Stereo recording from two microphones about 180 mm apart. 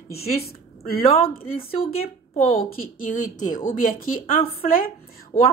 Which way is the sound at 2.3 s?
50° left (ahead or behind).